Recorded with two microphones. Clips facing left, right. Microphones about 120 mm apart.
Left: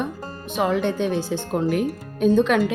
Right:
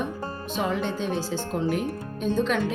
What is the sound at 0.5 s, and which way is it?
A woman's voice, 70° left (ahead or behind).